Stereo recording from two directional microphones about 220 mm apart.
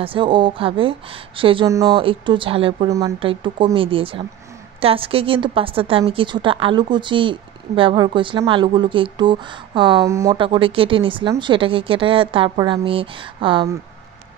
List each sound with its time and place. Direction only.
0.0 s a woman's voice: 25° right (ahead or behind)